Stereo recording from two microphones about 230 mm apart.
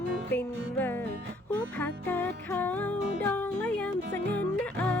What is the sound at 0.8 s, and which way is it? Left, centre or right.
Music, centre.